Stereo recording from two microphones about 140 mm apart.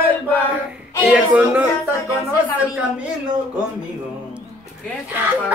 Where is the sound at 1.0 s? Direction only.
10° right (ahead or behind).